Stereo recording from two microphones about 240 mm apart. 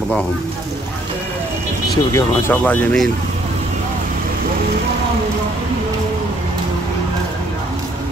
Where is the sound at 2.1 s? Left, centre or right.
Centre.